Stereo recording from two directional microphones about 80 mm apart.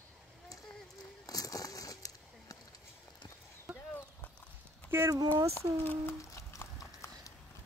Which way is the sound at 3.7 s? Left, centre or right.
Centre.